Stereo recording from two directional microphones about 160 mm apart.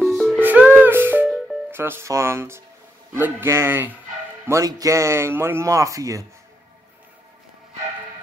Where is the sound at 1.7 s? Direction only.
15° right (ahead or behind).